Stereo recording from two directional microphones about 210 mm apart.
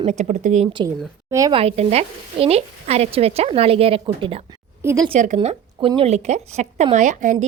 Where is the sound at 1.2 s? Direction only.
15° right (ahead or behind).